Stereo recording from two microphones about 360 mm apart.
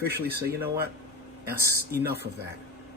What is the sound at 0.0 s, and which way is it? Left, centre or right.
Speech, right.